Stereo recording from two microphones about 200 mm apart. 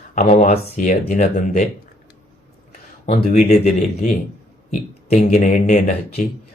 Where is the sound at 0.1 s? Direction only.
40° left (ahead or behind).